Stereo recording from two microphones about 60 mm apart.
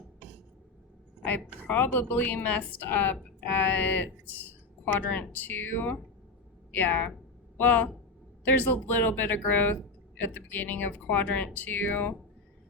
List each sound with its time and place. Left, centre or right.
1.6 s a woman's voice: left